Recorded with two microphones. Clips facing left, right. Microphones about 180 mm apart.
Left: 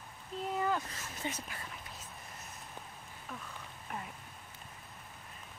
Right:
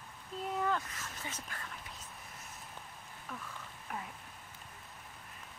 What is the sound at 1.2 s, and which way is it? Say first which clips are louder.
Speech: left 8 dB; 25° left (ahead or behind).